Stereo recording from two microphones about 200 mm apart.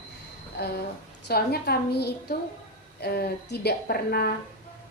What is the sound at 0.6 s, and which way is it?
A woman's voice, 55° left (ahead or behind).